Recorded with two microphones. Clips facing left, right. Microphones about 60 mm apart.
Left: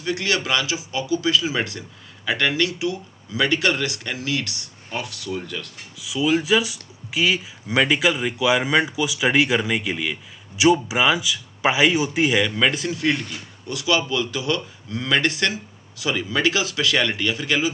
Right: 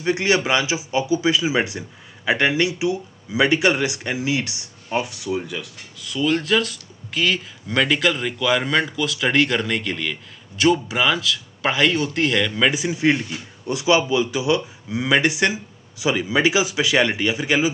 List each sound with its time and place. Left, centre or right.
0.0 s speech: right
5.9 s speech: centre
12.9 s speech: right